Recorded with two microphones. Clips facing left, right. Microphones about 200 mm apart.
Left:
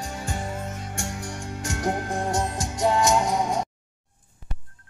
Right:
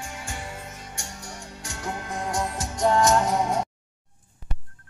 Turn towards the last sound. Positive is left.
turn(degrees=-5)  # may be behind; listen again after turning